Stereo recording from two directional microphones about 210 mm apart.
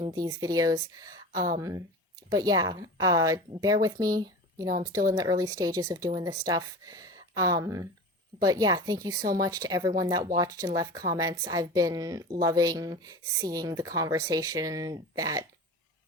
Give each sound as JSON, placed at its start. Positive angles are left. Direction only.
{"t": 0.0, "sound": "a woman's voice", "side_deg": -15}